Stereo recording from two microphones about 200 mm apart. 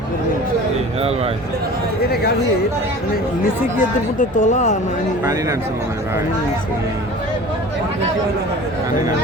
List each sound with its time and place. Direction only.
3.8 s speech: 40° left (ahead or behind)
5.2 s speech: 15° right (ahead or behind)